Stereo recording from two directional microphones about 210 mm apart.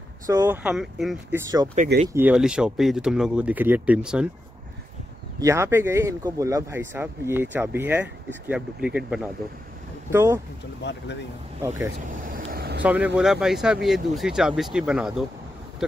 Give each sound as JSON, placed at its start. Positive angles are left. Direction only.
{"t": 0.3, "sound": "speech", "side_deg": -10}
{"t": 5.4, "sound": "speech", "side_deg": -15}
{"t": 10.8, "sound": "speech", "side_deg": 55}
{"t": 12.1, "sound": "vehicle", "side_deg": -40}
{"t": 12.8, "sound": "speech", "side_deg": -5}